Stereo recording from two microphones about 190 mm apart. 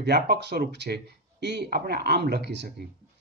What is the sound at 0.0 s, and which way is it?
Speech, 60° right (ahead or behind).